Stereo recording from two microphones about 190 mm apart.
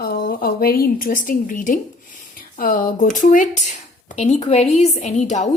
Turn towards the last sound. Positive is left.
turn(degrees=40)  # may be behind; listen again after turning